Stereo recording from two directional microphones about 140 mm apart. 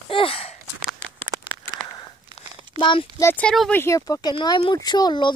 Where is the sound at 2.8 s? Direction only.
35° left (ahead or behind).